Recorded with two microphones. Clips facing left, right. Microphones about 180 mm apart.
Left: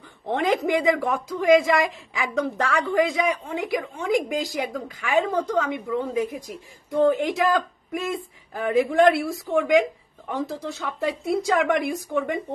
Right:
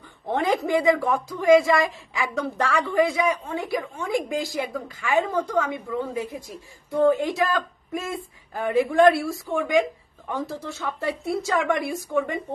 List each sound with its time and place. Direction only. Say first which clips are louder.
0.3 s speech: even; 15° left (ahead or behind)